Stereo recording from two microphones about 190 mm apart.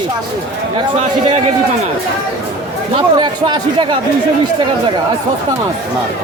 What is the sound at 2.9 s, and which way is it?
Speech, 25° right (ahead or behind).